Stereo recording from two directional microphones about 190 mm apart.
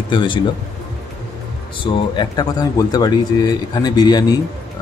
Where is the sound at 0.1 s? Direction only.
25° left (ahead or behind).